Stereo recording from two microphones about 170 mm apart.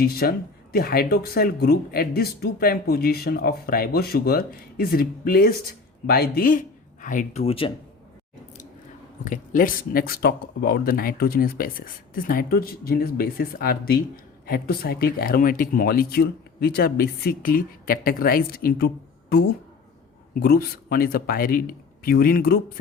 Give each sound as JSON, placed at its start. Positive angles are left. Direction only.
{"t": 0.0, "sound": "speech", "side_deg": 65}
{"t": 7.4, "sound": "speech", "side_deg": 35}
{"t": 9.2, "sound": "speech", "side_deg": 50}
{"t": 20.3, "sound": "speech", "side_deg": 60}